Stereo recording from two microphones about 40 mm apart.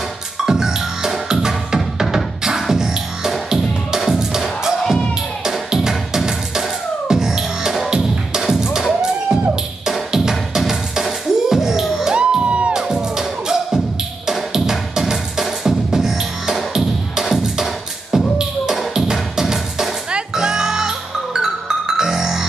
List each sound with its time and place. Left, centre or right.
0.5 s music: centre
12.2 s music: right
12.7 s music: centre